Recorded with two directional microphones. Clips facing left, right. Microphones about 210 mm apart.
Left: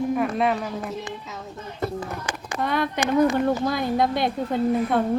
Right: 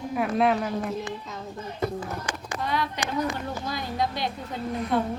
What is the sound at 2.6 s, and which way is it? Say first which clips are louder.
A woman's voice: left 5 dB; 55° left (ahead or behind).